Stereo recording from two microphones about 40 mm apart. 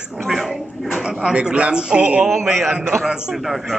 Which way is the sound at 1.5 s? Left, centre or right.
Right.